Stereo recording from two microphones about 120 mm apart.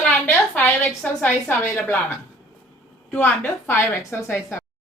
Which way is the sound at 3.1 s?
15° left (ahead or behind).